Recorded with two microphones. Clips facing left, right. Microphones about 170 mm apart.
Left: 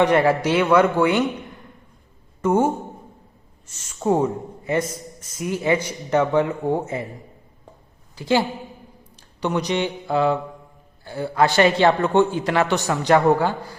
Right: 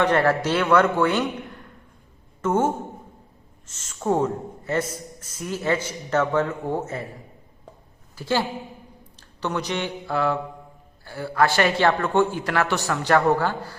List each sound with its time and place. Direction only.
0.0 s a man's voice: 15° left (ahead or behind)
2.4 s a man's voice: 10° left (ahead or behind)
8.1 s a woman's voice: 15° left (ahead or behind)